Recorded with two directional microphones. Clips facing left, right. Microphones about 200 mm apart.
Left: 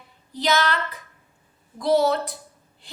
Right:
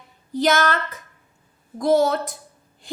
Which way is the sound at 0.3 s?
50° right (ahead or behind).